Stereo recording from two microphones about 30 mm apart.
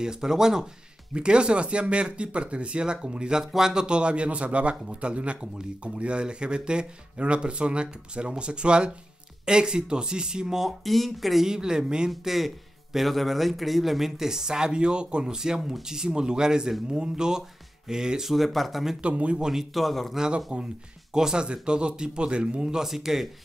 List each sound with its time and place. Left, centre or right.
0.0 s speech: right
1.1 s speech: right
3.3 s speech: centre
3.8 s speech: right
10.8 s speech: centre
11.4 s speech: right
12.3 s a man's voice: centre; by 15.3 s right
15.3 s speech: right
18.3 s speech: centre
19.0 s speech: right
19.5 s speech: centre
20.2 s speech: right
21.5 s speech: right
22.8 s a man's voice: centre